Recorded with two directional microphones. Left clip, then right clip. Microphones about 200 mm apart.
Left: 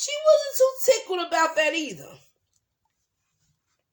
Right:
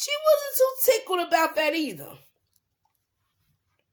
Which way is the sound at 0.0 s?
45° right (ahead or behind).